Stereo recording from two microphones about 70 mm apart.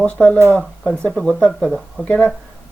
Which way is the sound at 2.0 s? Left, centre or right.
Centre.